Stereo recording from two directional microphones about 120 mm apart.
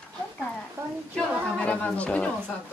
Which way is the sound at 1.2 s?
10° left (ahead or behind).